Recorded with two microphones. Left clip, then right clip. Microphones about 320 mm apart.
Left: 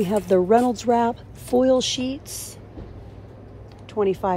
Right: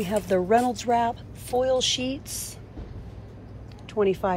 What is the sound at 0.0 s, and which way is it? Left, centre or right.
Speech, centre.